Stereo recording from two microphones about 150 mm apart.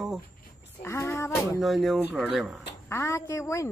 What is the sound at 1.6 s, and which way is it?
Speech, centre (ahead or behind).